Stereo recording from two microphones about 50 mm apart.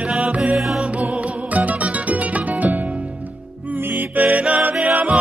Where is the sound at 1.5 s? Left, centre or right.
Right.